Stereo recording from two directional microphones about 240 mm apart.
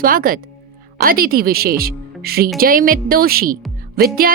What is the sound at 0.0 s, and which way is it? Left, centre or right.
Speech, right.